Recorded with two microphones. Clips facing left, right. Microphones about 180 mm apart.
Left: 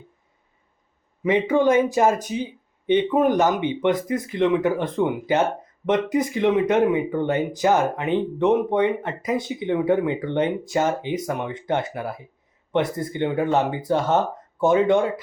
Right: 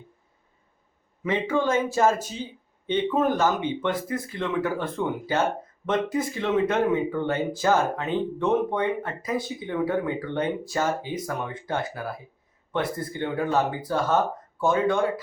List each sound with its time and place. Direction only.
1.2 s speech: 15° left (ahead or behind)